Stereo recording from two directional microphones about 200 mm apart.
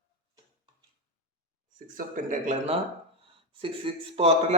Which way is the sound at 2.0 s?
35° right (ahead or behind).